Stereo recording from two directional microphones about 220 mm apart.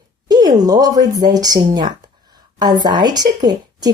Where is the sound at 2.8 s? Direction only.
20° right (ahead or behind).